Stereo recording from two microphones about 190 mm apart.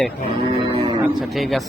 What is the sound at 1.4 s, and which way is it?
Speech, centre (ahead or behind).